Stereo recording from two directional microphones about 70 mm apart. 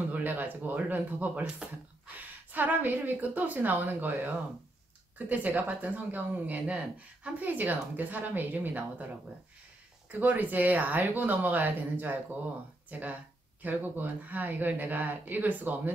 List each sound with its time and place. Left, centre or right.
0.1 s speech: right
10.1 s speech: right